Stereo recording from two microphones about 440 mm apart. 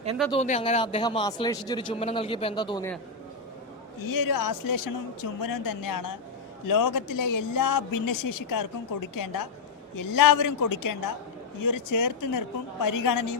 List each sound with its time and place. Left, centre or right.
0.3 s a man's voice: centre
4.0 s a woman's voice: left